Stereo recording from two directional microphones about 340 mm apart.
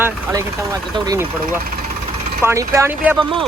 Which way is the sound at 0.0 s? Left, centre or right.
Centre.